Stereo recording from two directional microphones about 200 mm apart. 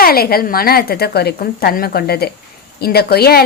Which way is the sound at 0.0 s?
50° left (ahead or behind).